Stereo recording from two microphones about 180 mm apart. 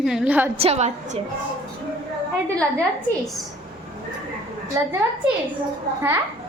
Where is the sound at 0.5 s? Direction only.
35° right (ahead or behind).